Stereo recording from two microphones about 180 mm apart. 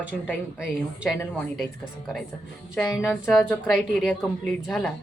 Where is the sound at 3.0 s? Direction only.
5° right (ahead or behind).